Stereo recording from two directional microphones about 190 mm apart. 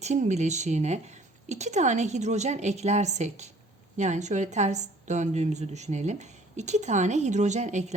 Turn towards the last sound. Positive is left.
turn(degrees=-35)  # may be behind; listen again after turning